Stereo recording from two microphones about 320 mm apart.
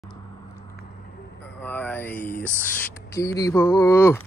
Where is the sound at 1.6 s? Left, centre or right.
Centre.